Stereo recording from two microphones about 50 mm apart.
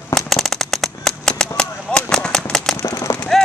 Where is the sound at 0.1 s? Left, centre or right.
Centre.